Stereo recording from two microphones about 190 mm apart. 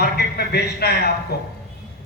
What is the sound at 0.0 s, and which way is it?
A man's voice, 60° left (ahead or behind).